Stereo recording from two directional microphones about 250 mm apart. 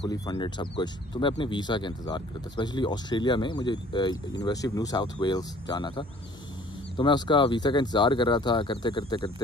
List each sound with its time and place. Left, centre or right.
0.0 s speech: centre